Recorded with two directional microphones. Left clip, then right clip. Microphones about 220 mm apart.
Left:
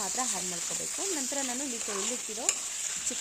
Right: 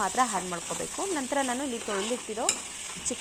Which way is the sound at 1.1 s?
5° right (ahead or behind).